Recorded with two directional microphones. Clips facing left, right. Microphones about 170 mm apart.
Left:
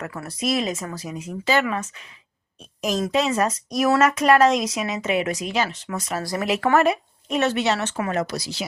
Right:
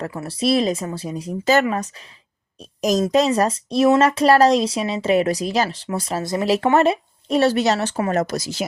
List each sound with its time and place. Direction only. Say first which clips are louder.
0.0 s speech: right 5 dB; 30° right (ahead or behind); by 8.6 s 45° right (ahead or behind)